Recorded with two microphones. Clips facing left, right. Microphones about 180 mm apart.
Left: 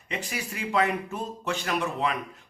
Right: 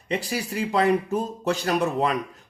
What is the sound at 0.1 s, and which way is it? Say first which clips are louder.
Speech: right 7 dB; 35° right (ahead or behind).